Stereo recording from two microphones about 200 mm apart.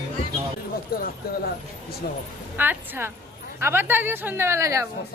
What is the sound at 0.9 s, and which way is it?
Speech, 50° left (ahead or behind).